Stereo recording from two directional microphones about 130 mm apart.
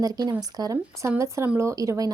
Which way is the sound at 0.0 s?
30° right (ahead or behind).